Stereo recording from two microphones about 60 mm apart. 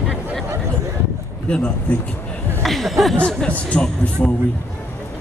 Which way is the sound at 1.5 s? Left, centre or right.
Centre.